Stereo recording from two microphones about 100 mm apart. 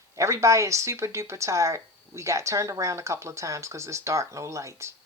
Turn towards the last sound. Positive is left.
turn(degrees=-30)  # may be behind; listen again after turning